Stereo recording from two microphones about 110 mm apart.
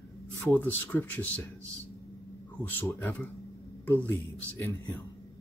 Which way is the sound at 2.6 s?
15° left (ahead or behind).